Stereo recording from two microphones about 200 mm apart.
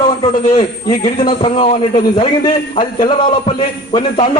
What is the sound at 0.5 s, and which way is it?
A man's voice, 20° left (ahead or behind).